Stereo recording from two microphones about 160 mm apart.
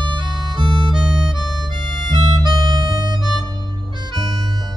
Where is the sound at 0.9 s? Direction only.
5° right (ahead or behind).